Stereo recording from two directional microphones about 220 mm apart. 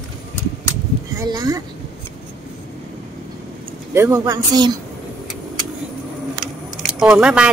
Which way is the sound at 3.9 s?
10° right (ahead or behind).